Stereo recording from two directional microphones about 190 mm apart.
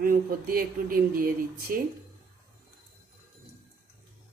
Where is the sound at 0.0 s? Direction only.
50° right (ahead or behind).